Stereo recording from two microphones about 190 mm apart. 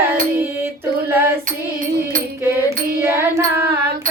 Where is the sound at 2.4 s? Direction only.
15° right (ahead or behind).